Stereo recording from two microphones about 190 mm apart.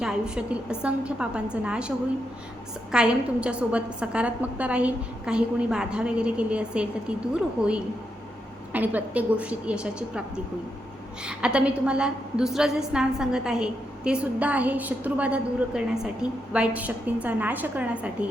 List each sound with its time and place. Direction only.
0.0 s a woman's voice: 5° right (ahead or behind)
2.9 s a woman's voice: 5° right (ahead or behind)
8.7 s a woman's voice: 10° right (ahead or behind)